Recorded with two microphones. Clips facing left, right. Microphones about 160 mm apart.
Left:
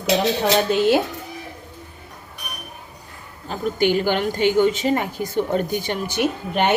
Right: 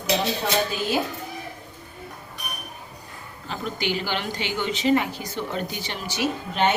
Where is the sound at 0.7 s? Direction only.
70° left (ahead or behind).